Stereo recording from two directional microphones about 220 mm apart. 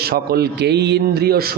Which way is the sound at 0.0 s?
45° right (ahead or behind).